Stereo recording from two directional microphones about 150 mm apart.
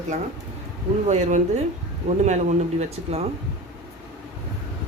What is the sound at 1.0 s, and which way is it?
Speech, 50° right (ahead or behind).